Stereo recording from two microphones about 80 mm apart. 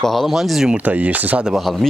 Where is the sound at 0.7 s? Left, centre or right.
Centre.